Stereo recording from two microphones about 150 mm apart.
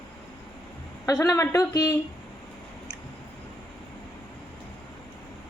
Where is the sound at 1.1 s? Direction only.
20° left (ahead or behind).